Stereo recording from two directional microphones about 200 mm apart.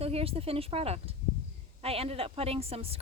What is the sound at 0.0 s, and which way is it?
Speech, 30° right (ahead or behind).